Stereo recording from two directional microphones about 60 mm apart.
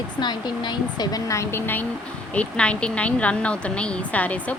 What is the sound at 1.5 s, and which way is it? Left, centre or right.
Speech, left.